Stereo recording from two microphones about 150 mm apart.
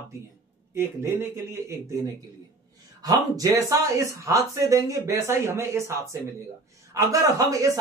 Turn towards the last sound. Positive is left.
turn(degrees=-20)  # may be behind; listen again after turning